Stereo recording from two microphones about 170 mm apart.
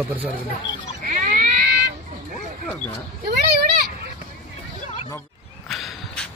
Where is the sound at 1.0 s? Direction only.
45° right (ahead or behind).